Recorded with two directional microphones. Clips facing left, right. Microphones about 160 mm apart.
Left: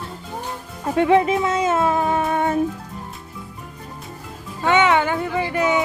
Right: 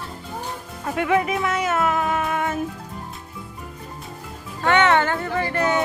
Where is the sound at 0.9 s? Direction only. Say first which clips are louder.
Left 5 dB; 30° left (ahead or behind).